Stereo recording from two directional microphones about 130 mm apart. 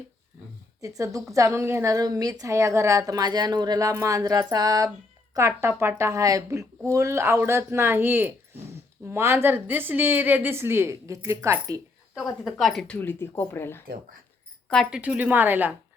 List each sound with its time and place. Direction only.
0.8 s a woman's voice: 25° right (ahead or behind)
12.1 s a woman's voice: centre (ahead or behind)
13.0 s speech: 15° left (ahead or behind)
14.8 s a woman's voice: 10° right (ahead or behind)